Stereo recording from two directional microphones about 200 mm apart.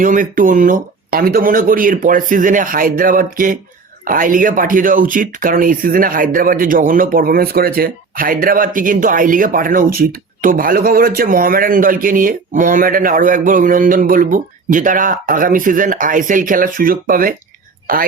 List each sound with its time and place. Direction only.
0.0 s speech: 40° right (ahead or behind)